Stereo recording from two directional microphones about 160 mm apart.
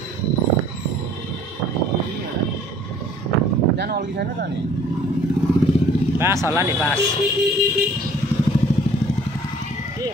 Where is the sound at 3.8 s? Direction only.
90° right.